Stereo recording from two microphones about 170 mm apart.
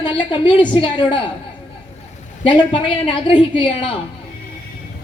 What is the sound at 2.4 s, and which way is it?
A woman's voice, 30° left (ahead or behind).